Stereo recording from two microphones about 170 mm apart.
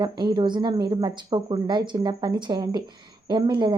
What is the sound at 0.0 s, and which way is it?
A woman's voice, 25° right (ahead or behind).